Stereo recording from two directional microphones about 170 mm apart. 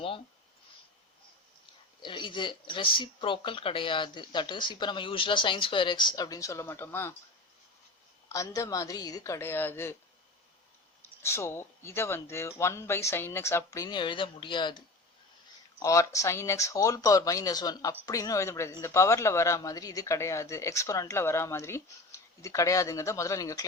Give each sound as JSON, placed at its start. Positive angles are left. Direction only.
{"t": 2.0, "sound": "speech", "side_deg": 30}
{"t": 8.3, "sound": "speech", "side_deg": 20}
{"t": 11.2, "sound": "speech", "side_deg": 15}
{"t": 15.8, "sound": "speech", "side_deg": 20}